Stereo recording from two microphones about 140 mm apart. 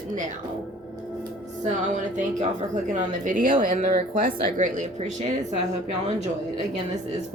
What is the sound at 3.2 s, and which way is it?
Speech, 75° right (ahead or behind).